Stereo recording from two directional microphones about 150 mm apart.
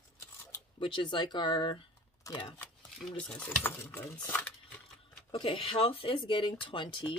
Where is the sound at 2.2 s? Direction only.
20° left (ahead or behind).